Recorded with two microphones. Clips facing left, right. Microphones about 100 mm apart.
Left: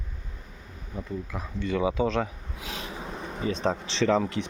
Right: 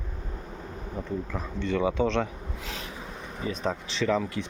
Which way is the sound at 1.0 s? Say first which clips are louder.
Right 1 dB; 5° left (ahead or behind).